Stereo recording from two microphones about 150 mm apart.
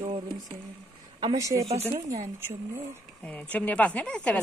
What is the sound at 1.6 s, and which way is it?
Speech, 45° right (ahead or behind).